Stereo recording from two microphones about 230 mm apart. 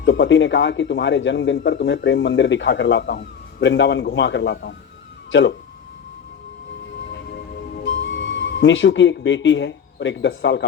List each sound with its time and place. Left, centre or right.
0.0 s speech: left
8.0 s speech: left